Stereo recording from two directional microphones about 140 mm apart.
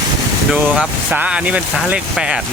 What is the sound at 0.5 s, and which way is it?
Speech, 10° right (ahead or behind).